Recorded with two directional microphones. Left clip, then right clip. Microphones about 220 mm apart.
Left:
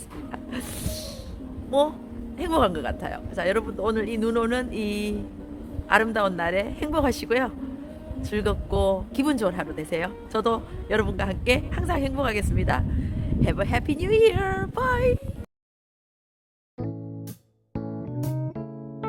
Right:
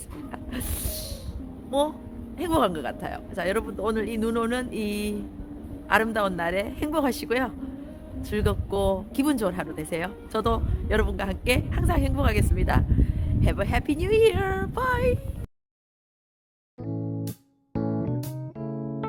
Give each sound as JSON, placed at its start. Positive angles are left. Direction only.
{"t": 0.3, "sound": "music", "side_deg": -5}
{"t": 1.7, "sound": "speech", "side_deg": -5}
{"t": 16.7, "sound": "music", "side_deg": 0}
{"t": 17.7, "sound": "keyboard", "side_deg": 0}